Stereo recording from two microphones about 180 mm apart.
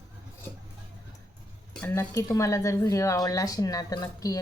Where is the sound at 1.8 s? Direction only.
15° left (ahead or behind).